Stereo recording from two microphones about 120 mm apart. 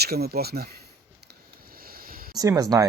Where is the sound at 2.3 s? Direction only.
30° right (ahead or behind).